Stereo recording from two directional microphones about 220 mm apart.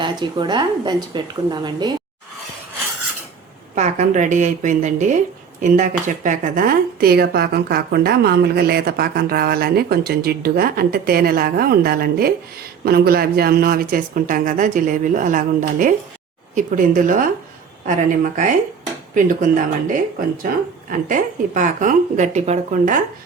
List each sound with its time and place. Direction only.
0.0 s a woman's voice: 20° right (ahead or behind)
3.8 s speech: 35° right (ahead or behind)